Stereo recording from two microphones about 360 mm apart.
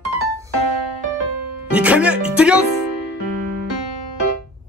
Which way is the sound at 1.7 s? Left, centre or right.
Centre.